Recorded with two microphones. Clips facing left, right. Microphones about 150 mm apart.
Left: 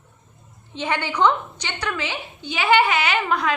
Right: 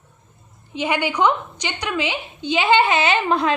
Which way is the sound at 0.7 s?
10° right (ahead or behind).